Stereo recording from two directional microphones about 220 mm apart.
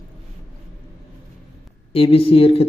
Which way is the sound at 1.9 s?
25° left (ahead or behind).